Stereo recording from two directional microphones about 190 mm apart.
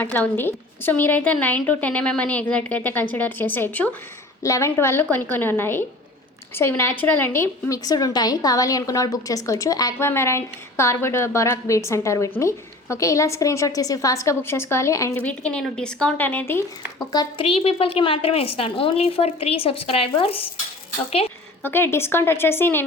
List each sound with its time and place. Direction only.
0.0 s a woman's voice: 10° left (ahead or behind)
17.1 s a woman's voice: 25° left (ahead or behind)
21.6 s a woman's voice: 10° left (ahead or behind)